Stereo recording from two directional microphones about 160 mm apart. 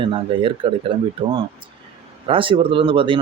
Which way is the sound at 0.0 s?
30° right (ahead or behind).